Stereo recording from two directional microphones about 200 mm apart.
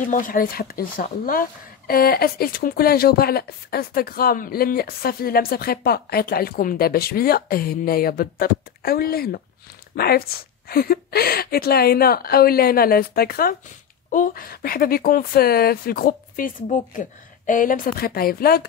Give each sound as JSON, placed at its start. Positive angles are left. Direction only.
{"t": 0.1, "sound": "speech", "side_deg": 45}